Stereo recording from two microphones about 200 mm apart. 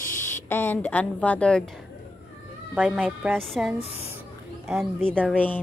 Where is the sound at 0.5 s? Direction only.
10° left (ahead or behind).